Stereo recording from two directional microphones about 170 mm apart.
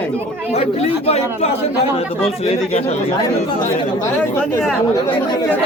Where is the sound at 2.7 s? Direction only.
35° left (ahead or behind).